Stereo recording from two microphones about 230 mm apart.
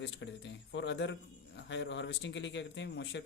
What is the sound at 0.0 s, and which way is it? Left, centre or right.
Speech, left.